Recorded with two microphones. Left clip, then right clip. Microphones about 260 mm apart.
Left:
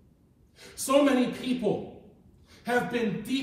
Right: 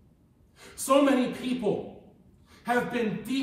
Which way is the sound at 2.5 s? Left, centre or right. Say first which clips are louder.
Even; centre.